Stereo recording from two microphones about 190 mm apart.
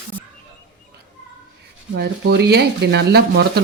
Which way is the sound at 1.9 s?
60° right (ahead or behind).